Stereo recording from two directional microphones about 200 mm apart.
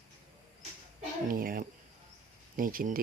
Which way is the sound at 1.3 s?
45° right (ahead or behind).